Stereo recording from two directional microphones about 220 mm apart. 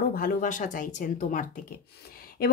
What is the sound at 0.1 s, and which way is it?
Speech, 40° left (ahead or behind).